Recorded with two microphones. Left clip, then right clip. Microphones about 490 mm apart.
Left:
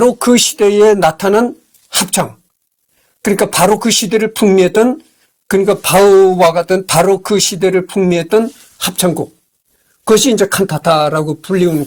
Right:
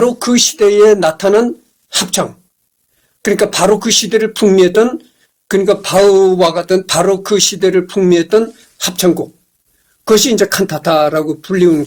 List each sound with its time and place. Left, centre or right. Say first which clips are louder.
0.2 s speech: left 1 dB; left
5.5 s speech: left 1 dB; left
10.0 s speech: even; left